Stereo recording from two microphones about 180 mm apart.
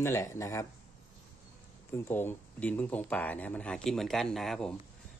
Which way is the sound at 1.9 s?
10° left (ahead or behind).